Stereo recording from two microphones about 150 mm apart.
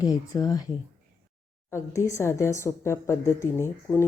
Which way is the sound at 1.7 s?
20° left (ahead or behind).